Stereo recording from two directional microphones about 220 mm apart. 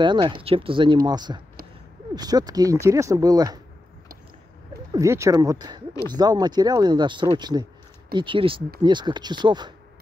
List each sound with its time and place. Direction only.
0.0 s speech: 20° right (ahead or behind)
4.9 s speech: 15° right (ahead or behind)